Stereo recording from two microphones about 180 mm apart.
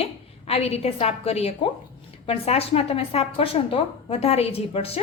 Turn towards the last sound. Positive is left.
turn(degrees=35)  # may be behind; listen again after turning